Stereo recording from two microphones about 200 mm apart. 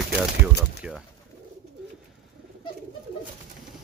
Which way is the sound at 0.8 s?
5° right (ahead or behind).